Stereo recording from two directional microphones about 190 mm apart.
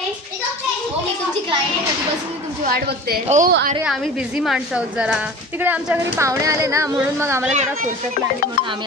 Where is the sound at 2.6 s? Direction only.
55° right (ahead or behind).